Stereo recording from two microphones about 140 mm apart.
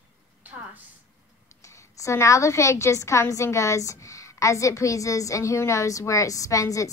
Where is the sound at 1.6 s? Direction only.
20° left (ahead or behind).